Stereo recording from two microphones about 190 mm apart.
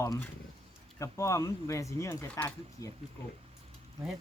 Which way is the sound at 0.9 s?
15° left (ahead or behind).